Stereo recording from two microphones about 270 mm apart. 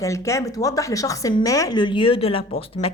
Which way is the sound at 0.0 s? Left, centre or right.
Centre.